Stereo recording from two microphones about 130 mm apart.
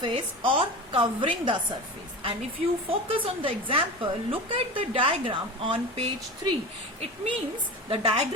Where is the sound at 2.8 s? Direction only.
45° right (ahead or behind).